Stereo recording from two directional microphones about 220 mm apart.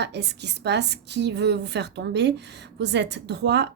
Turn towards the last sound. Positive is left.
turn(degrees=-50)  # may be behind; listen again after turning